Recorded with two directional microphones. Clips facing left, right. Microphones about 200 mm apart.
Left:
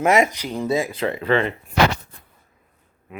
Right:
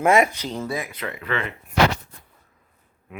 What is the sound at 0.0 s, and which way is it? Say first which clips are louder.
Speech: even; 15° left (ahead or behind).